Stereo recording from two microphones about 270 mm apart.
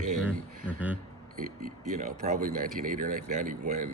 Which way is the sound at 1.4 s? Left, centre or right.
Right.